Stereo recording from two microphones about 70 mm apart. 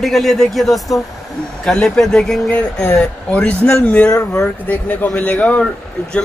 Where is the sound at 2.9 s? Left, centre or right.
Centre.